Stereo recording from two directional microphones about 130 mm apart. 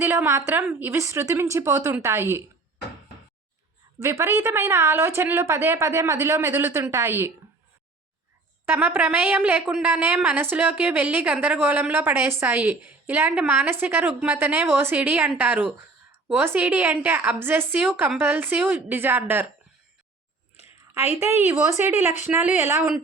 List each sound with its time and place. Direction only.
0.0 s speech: 20° right (ahead or behind)
4.0 s speech: 20° right (ahead or behind)
8.6 s a woman's voice: 15° right (ahead or behind)
21.2 s a woman's voice: 20° right (ahead or behind)